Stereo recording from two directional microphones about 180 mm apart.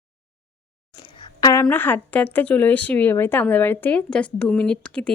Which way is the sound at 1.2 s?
25° left (ahead or behind).